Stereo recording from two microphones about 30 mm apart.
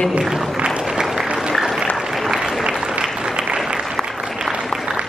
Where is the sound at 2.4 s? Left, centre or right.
Right.